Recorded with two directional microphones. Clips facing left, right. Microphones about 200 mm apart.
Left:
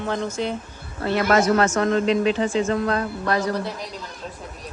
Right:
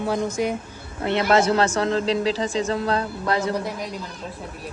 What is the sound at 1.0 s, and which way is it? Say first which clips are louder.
Speech: even; 25° right (ahead or behind).